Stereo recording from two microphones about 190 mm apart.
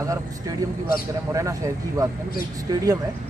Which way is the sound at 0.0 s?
15° right (ahead or behind).